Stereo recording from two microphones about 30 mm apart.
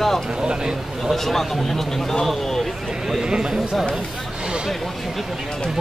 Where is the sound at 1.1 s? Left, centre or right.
Centre.